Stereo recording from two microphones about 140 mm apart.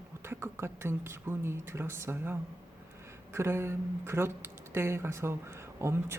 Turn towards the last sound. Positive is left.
turn(degrees=-20)  # may be behind; listen again after turning